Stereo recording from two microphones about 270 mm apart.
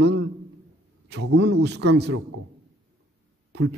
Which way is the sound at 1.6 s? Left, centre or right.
Right.